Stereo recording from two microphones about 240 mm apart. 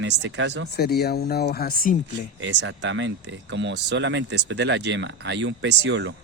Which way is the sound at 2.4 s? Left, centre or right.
Right.